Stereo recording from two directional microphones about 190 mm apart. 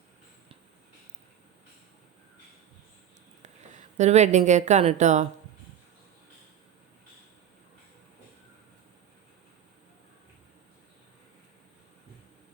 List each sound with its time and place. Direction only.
3.4 s speech: 40° right (ahead or behind)